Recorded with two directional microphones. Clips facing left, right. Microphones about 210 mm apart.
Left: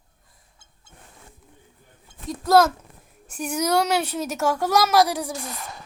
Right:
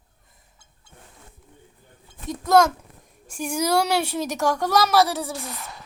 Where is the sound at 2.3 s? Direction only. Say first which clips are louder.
Even; centre (ahead or behind).